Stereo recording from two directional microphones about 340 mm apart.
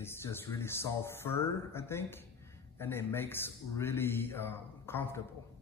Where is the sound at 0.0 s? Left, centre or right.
Centre.